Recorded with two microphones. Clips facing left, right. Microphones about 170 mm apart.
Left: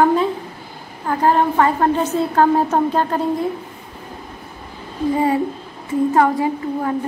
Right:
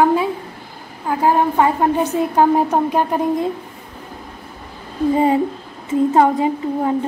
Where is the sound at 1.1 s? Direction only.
10° right (ahead or behind).